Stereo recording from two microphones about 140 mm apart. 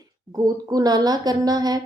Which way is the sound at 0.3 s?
25° right (ahead or behind).